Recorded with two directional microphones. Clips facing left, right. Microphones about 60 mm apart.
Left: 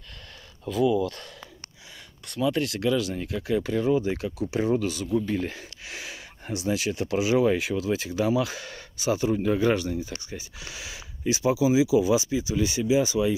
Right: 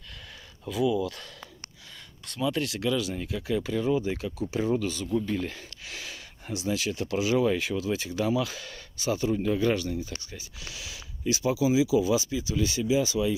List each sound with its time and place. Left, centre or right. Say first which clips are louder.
2.2 s speech: left 3 dB; centre
6.5 s speech: left 2 dB; centre